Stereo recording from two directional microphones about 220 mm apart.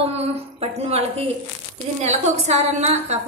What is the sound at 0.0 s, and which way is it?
A woman's voice, 30° right (ahead or behind).